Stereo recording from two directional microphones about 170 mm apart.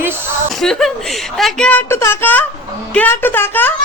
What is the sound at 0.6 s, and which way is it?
A woman's voice, centre (ahead or behind).